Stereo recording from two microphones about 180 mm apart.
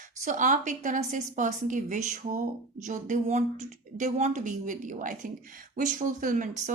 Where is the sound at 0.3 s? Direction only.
45° right (ahead or behind).